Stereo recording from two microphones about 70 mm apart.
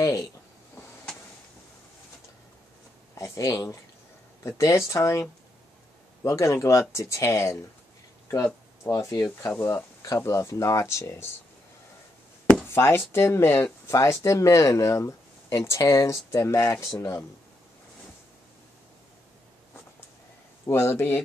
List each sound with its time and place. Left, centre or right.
0.0 s a sound: left
3.2 s speech: left
6.2 s speech: left
8.8 s speech: left
9.6 s speech: left
12.6 s speech: left
20.6 s speech: left